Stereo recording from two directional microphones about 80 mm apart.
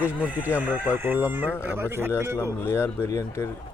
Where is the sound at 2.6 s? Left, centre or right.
Left.